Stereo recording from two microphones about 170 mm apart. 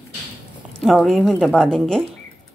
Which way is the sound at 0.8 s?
Centre (ahead or behind).